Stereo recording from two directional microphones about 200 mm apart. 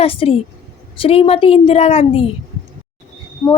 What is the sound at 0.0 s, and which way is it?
A woman's voice, 30° left (ahead or behind).